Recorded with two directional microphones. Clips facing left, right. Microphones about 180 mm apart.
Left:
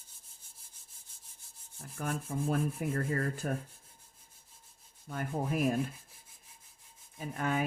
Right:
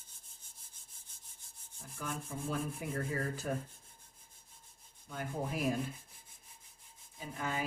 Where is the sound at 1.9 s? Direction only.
55° left (ahead or behind).